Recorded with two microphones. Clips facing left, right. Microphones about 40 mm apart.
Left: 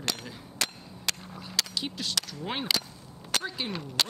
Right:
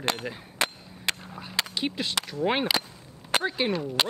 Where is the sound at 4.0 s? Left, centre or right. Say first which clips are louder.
Right 2 dB; right.